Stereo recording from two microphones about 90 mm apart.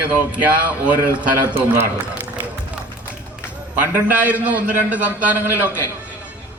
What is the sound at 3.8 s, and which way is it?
A man's voice, 15° right (ahead or behind).